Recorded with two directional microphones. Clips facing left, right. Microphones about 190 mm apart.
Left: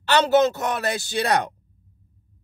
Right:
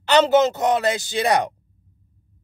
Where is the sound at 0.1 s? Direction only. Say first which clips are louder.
Right 2 dB; 20° right (ahead or behind).